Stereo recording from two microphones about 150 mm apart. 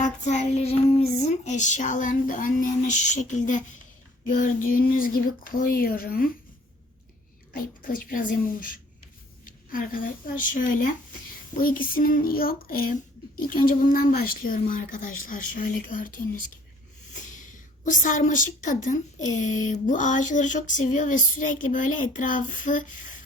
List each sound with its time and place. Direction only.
0.0 s female singing: 50° left (ahead or behind)
4.3 s speech: 65° left (ahead or behind)
7.5 s a woman's voice: 70° left (ahead or behind)
17.8 s a woman's voice: 60° left (ahead or behind)